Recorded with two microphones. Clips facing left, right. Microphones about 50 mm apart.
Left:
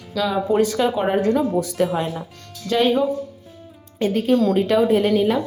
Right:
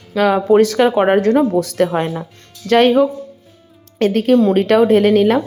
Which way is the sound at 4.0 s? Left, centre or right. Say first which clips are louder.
Right 5 dB; right.